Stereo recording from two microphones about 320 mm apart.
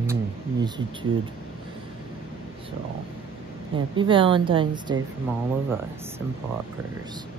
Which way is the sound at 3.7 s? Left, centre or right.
Centre.